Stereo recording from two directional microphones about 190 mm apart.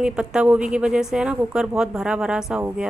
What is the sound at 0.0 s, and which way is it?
Speech, 5° right (ahead or behind).